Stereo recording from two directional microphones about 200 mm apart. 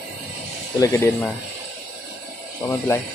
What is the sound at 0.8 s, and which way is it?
Speech, 15° left (ahead or behind).